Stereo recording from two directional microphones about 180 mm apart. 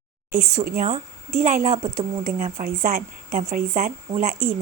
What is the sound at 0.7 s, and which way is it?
A woman's voice, 45° right (ahead or behind).